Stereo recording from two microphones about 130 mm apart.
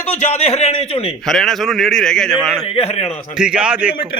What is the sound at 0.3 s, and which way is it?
Speech, 55° left (ahead or behind).